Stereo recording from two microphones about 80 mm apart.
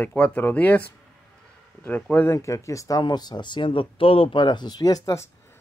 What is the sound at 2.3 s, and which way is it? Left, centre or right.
Speech, left.